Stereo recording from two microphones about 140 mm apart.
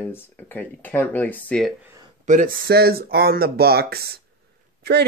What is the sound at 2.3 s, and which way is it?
Speech, 80° right.